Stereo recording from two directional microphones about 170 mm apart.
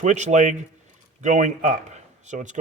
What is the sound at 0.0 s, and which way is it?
A man's voice, 45° right (ahead or behind).